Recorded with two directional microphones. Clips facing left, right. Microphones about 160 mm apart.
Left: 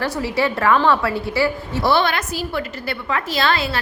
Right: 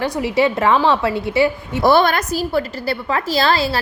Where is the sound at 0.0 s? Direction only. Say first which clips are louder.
Right 4 dB; 20° right (ahead or behind).